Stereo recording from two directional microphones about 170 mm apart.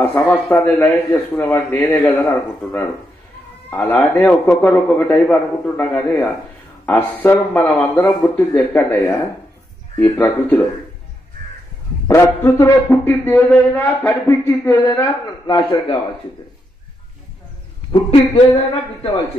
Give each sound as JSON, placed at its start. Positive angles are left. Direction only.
{"t": 0.1, "sound": "a man's voice", "side_deg": 10}
{"t": 3.7, "sound": "a man's voice", "side_deg": 10}
{"t": 12.1, "sound": "a man's voice", "side_deg": 15}
{"t": 17.9, "sound": "speech", "side_deg": 30}